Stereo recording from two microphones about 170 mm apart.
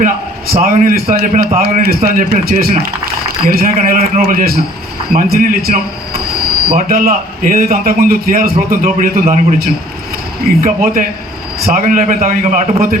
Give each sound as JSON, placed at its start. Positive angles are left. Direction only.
{"t": 0.6, "sound": "a man's voice", "side_deg": -50}
{"t": 6.8, "sound": "a man's voice", "side_deg": -55}
{"t": 10.6, "sound": "a man's voice", "side_deg": -55}